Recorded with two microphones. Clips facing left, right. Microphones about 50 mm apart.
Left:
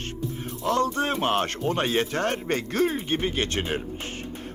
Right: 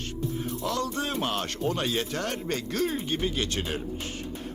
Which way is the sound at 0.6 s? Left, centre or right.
Left.